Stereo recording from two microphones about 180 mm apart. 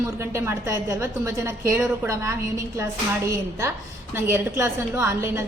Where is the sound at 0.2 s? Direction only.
15° right (ahead or behind).